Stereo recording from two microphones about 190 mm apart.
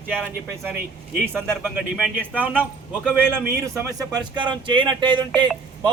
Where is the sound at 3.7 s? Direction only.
20° right (ahead or behind).